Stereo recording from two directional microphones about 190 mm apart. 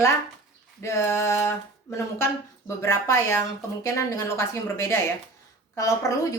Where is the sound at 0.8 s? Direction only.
15° left (ahead or behind).